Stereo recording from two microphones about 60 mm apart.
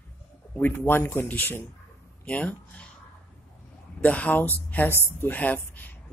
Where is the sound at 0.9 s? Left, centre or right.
Left.